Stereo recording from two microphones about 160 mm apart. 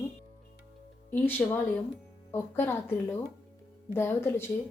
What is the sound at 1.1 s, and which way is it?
Speech, 15° left (ahead or behind).